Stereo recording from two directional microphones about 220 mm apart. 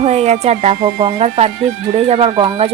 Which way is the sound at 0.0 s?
30° right (ahead or behind).